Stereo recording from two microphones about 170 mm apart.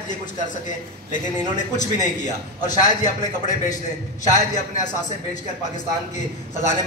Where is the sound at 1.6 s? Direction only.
45° left (ahead or behind).